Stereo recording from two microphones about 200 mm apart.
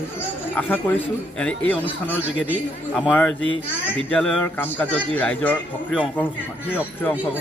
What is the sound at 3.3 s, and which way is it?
Speech, 70° left (ahead or behind).